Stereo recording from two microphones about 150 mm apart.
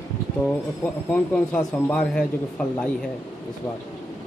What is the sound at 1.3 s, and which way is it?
A man's voice, 5° left (ahead or behind).